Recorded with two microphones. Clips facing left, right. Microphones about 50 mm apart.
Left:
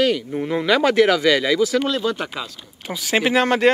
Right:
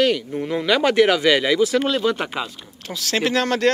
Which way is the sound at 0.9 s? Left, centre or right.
Centre.